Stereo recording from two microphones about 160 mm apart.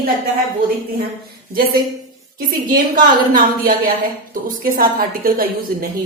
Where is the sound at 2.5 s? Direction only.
60° right (ahead or behind).